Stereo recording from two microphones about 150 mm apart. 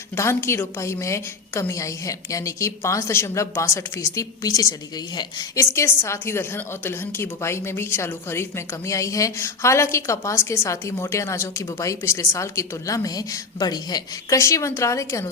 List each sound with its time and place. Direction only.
0.2 s a woman's voice: 20° left (ahead or behind)